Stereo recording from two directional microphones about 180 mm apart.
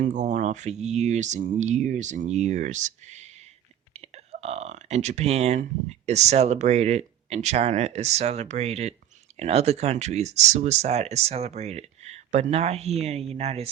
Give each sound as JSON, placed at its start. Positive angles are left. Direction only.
{"t": 0.0, "sound": "speech", "side_deg": -40}